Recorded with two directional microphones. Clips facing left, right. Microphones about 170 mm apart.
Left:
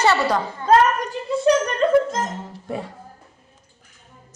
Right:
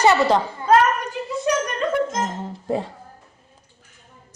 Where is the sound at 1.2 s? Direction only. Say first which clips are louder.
Even; 10° right (ahead or behind).